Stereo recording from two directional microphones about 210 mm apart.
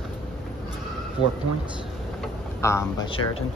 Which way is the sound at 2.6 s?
15° left (ahead or behind).